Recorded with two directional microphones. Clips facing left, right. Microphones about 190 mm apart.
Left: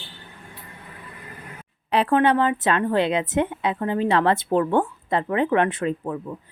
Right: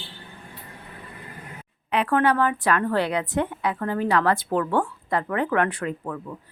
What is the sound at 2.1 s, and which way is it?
Speech, 20° left (ahead or behind).